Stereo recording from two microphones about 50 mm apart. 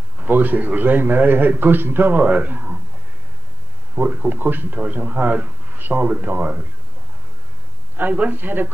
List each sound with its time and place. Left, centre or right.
0.2 s a man's voice: right
3.9 s a man's voice: right
8.0 s a man's voice: right